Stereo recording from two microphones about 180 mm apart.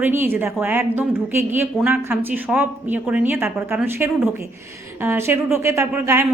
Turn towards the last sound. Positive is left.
turn(degrees=-15)  # may be behind; listen again after turning